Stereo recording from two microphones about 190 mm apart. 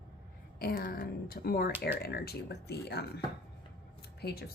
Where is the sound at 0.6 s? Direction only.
50° left (ahead or behind).